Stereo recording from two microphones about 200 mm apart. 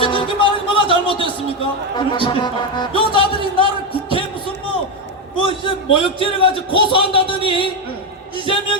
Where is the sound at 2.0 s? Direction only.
25° left (ahead or behind).